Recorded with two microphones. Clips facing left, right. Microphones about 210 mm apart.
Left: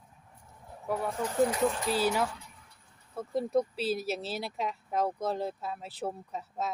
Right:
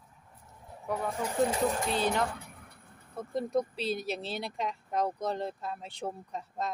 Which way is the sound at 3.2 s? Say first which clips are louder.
Left 2 dB; centre (ahead or behind).